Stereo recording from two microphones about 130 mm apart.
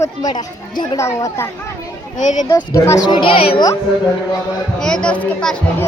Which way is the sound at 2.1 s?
70° left (ahead or behind).